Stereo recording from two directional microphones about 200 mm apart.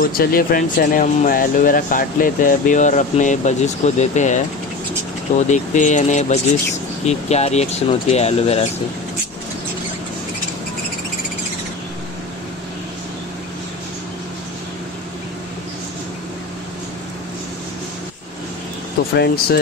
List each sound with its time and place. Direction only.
0.0 s speech: 45° left (ahead or behind)
5.5 s speech: 35° left (ahead or behind)
19.1 s speech: 55° left (ahead or behind)